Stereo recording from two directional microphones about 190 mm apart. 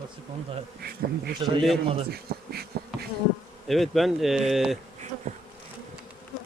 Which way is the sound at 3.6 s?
Centre (ahead or behind).